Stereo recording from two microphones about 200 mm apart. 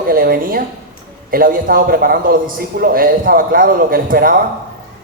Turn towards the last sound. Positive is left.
turn(degrees=-45)  # may be behind; listen again after turning